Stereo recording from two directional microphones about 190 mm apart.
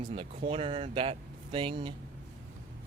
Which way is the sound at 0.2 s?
30° right (ahead or behind).